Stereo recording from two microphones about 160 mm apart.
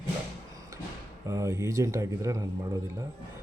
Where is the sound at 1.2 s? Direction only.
15° right (ahead or behind).